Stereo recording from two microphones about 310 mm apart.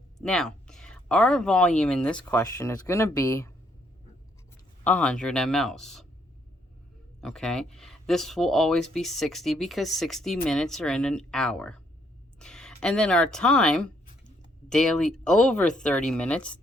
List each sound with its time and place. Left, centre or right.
0.2 s speech: centre
4.8 s speech: centre
7.2 s speech: centre